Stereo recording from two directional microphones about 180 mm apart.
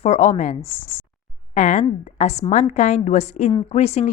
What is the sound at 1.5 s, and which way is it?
A woman's voice, 40° left (ahead or behind).